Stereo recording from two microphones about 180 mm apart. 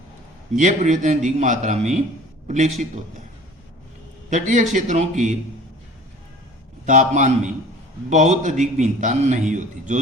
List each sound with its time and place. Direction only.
0.5 s a man's voice: 45° right (ahead or behind)
4.3 s a man's voice: 45° right (ahead or behind)
6.8 s a man's voice: 45° right (ahead or behind)